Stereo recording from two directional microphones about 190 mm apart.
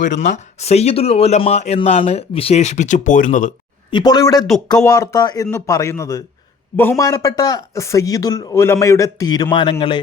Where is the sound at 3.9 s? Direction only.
20° left (ahead or behind).